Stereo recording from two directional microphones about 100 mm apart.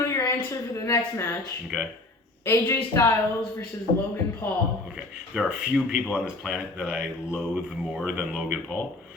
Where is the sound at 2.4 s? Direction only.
25° left (ahead or behind).